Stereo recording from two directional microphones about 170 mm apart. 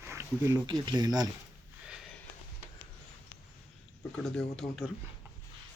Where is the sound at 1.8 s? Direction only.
5° right (ahead or behind).